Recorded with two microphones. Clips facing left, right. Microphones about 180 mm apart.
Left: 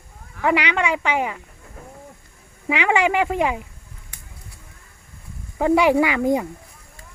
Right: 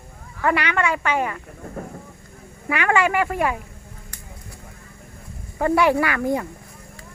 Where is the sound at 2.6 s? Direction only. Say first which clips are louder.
Left 1 dB; 15° left (ahead or behind).